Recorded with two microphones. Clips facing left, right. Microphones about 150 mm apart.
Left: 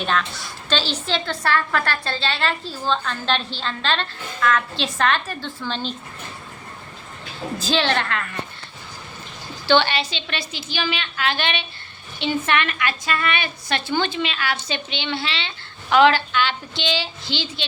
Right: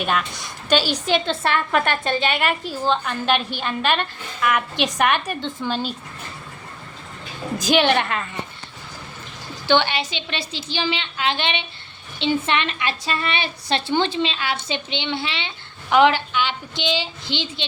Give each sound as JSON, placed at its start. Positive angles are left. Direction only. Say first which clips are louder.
{"t": 0.0, "sound": "a woman's voice", "louder": "even", "side_deg": -10}
{"t": 7.6, "sound": "a woman's voice", "louder": "right 4 dB", "side_deg": -15}
{"t": 9.6, "sound": "a woman's voice", "louder": "left 1 dB", "side_deg": -15}
{"t": 10.5, "sound": "a woman's voice", "louder": "right 2 dB", "side_deg": -30}